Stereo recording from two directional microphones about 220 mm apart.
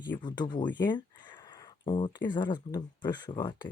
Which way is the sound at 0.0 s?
20° left (ahead or behind).